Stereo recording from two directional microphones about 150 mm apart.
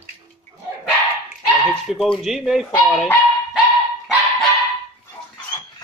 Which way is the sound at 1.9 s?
Centre (ahead or behind).